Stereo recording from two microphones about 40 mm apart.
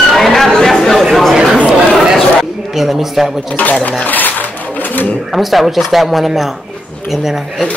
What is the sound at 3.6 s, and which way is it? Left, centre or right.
Speech, left.